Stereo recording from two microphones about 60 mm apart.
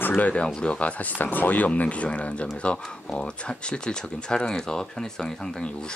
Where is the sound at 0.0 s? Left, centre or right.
Left.